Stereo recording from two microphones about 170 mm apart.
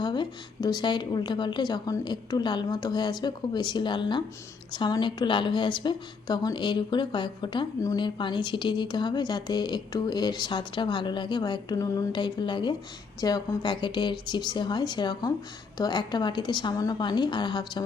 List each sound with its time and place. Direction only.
0.0 s a woman's voice: 25° left (ahead or behind)